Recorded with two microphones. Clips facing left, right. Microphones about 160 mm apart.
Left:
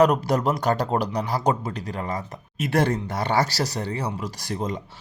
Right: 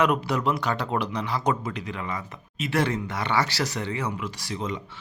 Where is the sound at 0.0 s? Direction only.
40° left (ahead or behind).